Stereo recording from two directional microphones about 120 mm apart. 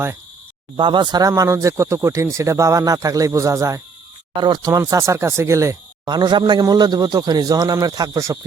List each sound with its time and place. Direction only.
0.8 s speech: 40° right (ahead or behind)
1.3 s speech: 25° right (ahead or behind)